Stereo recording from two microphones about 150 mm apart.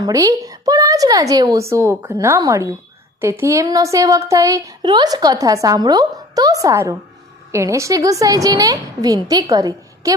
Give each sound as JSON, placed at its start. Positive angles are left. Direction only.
{"t": 0.0, "sound": "speech", "side_deg": -20}